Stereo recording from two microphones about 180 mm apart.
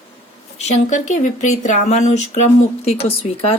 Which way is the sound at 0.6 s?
40° left (ahead or behind).